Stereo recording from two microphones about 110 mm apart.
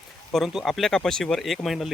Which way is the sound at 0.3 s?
Centre (ahead or behind).